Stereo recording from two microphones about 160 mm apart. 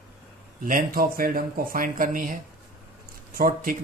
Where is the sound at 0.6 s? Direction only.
60° right (ahead or behind).